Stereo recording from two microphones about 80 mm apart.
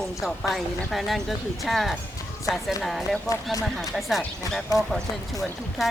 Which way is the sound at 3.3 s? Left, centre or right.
Left.